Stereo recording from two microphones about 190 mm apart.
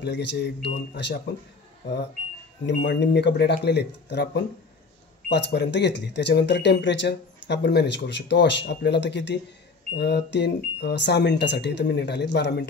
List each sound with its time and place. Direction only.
0.0 s speech: 65° left (ahead or behind)
2.6 s speech: 65° left (ahead or behind)